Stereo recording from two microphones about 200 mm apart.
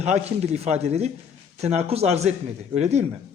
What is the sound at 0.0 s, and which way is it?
A man's voice, 35° right (ahead or behind).